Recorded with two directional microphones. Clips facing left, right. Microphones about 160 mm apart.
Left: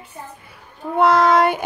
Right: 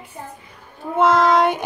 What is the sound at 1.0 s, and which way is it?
Child singing, centre (ahead or behind).